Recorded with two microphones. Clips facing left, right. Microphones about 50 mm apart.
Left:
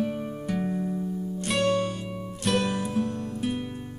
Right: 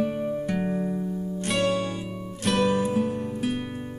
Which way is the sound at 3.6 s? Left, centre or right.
Right.